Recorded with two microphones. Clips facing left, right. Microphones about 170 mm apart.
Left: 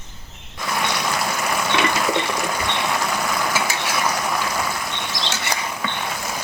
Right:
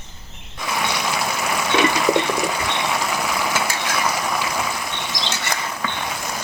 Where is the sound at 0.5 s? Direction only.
Centre (ahead or behind).